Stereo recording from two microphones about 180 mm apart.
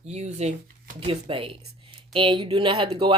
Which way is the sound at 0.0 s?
40° right (ahead or behind).